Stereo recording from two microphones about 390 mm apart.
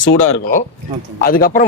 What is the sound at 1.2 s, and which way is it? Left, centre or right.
Speech, left.